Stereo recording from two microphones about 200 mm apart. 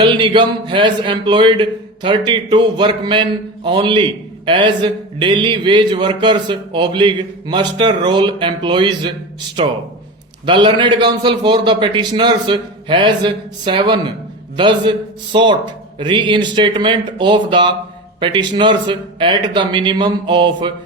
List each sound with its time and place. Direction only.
0.0 s speech: 25° right (ahead or behind)
10.4 s speech: 25° right (ahead or behind)